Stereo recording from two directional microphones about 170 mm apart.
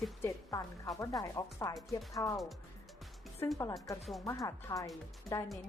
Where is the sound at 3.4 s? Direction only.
20° left (ahead or behind).